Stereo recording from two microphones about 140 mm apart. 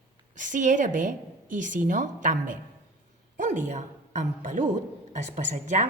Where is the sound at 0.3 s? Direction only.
65° right (ahead or behind).